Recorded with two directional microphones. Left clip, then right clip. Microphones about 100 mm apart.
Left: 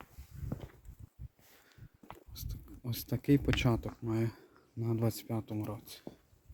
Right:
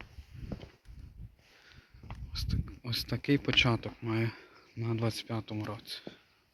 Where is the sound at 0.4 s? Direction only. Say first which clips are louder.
Even; 35° left (ahead or behind).